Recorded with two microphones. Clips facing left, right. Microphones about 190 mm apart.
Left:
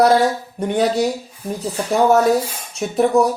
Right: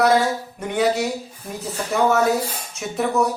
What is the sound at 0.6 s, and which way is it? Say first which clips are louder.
Speech: left 3 dB; 35° left (ahead or behind).